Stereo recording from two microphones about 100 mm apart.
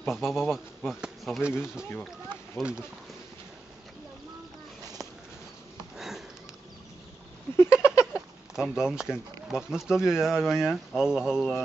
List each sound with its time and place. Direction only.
0.1 s speech: 5° right (ahead or behind)
2.6 s speech: 10° left (ahead or behind)
5.9 s sniff: 5° right (ahead or behind)
7.5 s a sound: 25° left (ahead or behind)
8.0 s speech: 10° right (ahead or behind)